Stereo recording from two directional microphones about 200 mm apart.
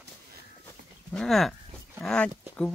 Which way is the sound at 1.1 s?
Centre (ahead or behind).